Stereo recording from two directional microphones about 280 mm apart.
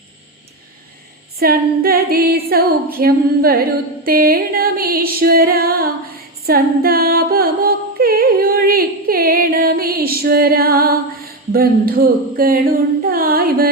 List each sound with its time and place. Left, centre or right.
1.4 s female singing: right
6.4 s music: right
11.5 s female singing: right